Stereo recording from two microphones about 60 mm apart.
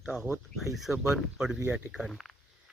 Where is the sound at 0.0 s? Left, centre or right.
Centre.